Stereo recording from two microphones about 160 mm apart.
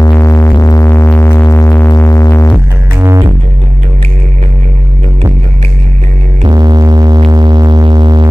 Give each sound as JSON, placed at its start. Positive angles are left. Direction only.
{"t": 0.0, "sound": "synthesizer", "side_deg": 15}
{"t": 3.0, "sound": "music", "side_deg": -15}
{"t": 6.4, "sound": "music", "side_deg": -25}